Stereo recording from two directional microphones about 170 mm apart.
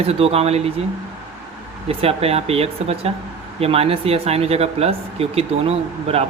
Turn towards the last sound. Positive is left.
turn(degrees=-35)  # may be behind; listen again after turning